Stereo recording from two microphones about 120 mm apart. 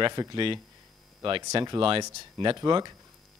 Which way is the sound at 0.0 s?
40° right (ahead or behind).